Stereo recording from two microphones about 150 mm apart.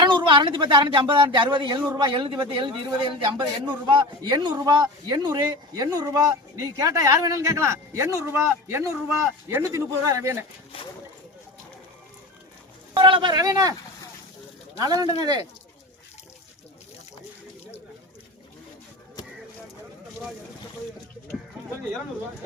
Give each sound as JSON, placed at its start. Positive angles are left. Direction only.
{"t": 0.0, "sound": "speech", "side_deg": -30}
{"t": 13.0, "sound": "speech", "side_deg": -35}
{"t": 14.8, "sound": "speech", "side_deg": -25}